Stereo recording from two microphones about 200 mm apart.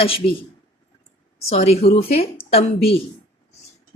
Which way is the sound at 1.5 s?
30° left (ahead or behind).